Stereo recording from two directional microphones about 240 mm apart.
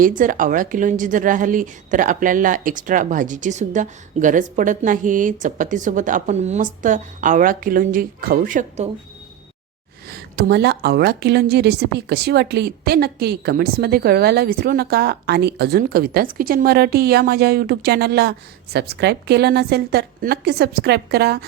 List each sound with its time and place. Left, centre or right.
0.0 s a woman's voice: right
10.1 s a woman's voice: right